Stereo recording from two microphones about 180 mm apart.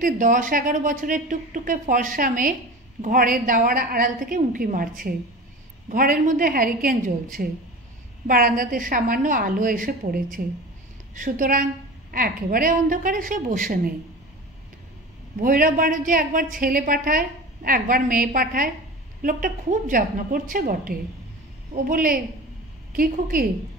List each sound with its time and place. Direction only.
0.0 s speech: 50° right (ahead or behind)
15.4 s speech: 50° right (ahead or behind)